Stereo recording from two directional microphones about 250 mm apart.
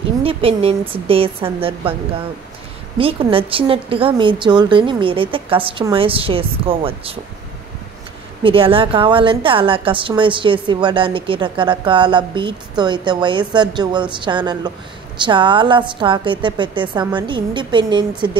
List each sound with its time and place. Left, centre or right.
0.2 s a woman's voice: right
3.0 s a woman's voice: right
8.4 s a woman's voice: right